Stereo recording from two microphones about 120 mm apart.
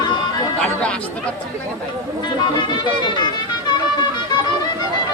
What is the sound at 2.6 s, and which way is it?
Speech, 40° left (ahead or behind).